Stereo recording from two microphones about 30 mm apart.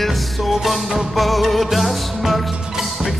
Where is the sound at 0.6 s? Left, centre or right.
Centre.